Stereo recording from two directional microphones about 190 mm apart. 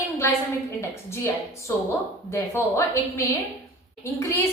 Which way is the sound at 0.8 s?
15° left (ahead or behind).